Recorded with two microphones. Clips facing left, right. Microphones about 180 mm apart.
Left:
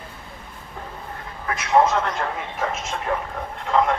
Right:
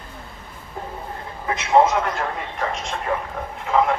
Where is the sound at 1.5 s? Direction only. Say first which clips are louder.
Right 2 dB; 25° right (ahead or behind).